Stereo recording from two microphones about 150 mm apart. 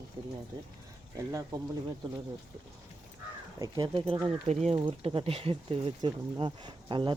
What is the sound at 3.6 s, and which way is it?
Speech, 30° right (ahead or behind).